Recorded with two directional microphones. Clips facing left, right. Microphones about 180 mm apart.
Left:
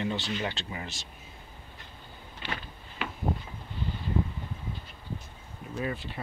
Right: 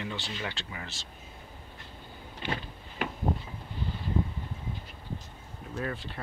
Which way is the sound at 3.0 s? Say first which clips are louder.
Right 3 dB; 45° right (ahead or behind).